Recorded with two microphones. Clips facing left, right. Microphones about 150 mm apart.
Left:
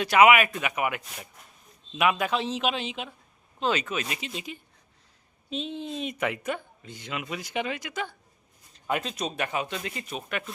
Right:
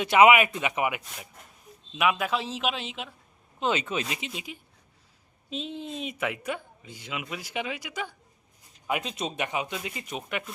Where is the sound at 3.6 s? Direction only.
20° right (ahead or behind).